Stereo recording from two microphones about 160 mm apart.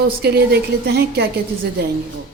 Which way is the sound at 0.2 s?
85° right.